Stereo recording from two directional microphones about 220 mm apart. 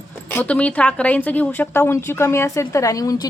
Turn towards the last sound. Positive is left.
turn(degrees=15)  # may be behind; listen again after turning